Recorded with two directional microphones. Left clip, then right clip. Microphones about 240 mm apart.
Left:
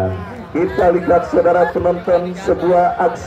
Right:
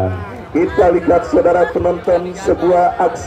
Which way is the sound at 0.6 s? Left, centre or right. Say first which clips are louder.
Right 2 dB; right.